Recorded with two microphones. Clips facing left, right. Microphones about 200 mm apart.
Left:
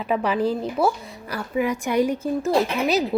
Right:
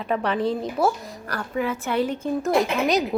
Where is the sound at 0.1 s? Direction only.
5° left (ahead or behind).